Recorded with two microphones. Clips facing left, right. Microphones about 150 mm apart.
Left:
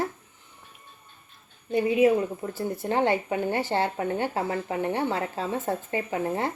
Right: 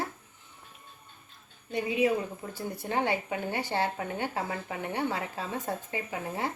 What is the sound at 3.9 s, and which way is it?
Speech, 35° left (ahead or behind).